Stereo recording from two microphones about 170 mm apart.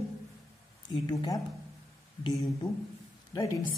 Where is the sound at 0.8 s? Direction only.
25° left (ahead or behind).